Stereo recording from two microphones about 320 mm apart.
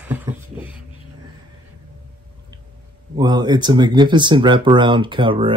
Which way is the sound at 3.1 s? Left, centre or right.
Centre.